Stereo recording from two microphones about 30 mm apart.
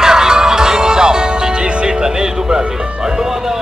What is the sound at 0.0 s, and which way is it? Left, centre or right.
Music, centre.